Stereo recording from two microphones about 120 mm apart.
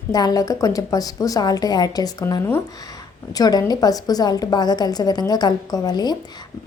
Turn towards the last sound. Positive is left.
turn(degrees=35)  # may be behind; listen again after turning